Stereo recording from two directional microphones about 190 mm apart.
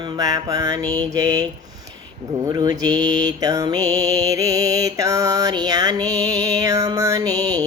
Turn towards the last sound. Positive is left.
turn(degrees=-20)  # may be behind; listen again after turning